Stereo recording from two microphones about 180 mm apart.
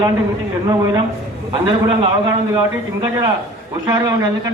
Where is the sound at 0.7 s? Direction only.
20° right (ahead or behind).